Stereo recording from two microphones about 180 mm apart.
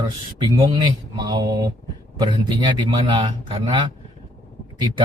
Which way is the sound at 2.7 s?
25° right (ahead or behind).